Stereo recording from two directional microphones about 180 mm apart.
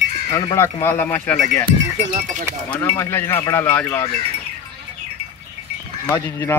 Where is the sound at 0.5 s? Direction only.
15° left (ahead or behind).